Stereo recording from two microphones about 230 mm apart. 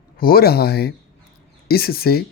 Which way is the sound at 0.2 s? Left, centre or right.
Left.